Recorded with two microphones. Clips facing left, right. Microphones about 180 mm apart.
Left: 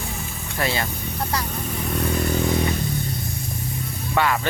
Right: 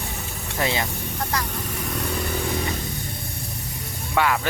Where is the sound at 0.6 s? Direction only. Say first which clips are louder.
Even; 20° right (ahead or behind).